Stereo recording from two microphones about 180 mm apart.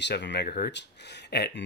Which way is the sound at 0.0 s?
75° left (ahead or behind).